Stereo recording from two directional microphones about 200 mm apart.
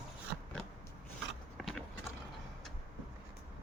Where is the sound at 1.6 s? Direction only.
Centre (ahead or behind).